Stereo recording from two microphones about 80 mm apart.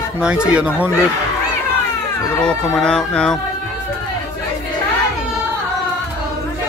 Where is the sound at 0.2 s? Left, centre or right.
Centre.